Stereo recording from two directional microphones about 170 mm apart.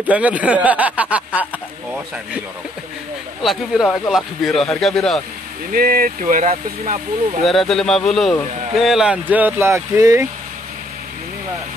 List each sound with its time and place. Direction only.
0.1 s speech: 10° right (ahead or behind)
3.4 s a man's voice: centre (ahead or behind)
5.7 s speech: 60° right (ahead or behind)
7.4 s a man's voice: centre (ahead or behind); by 10.2 s 15° right (ahead or behind)